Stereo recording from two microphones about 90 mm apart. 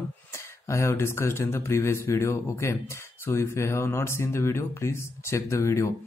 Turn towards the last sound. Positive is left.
turn(degrees=35)  # may be behind; listen again after turning